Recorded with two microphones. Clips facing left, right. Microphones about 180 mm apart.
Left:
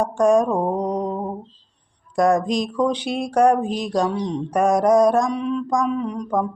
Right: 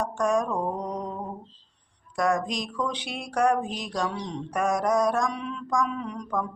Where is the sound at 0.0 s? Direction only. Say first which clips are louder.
Left 8 dB; 35° left (ahead or behind).